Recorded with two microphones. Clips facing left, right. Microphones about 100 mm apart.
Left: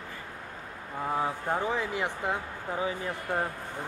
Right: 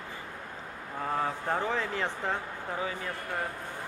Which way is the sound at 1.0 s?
10° left (ahead or behind).